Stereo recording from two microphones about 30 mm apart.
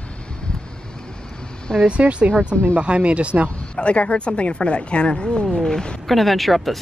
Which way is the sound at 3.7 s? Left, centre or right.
Left.